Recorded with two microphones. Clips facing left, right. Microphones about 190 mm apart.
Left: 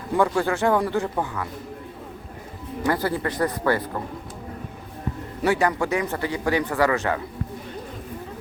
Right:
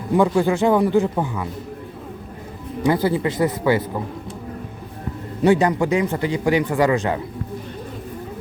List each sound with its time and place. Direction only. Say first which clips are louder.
0.1 s speech: right 4 dB; 10° right (ahead or behind)
2.8 s speech: right 5 dB; 15° right (ahead or behind)
5.4 s speech: right 5 dB; 20° right (ahead or behind)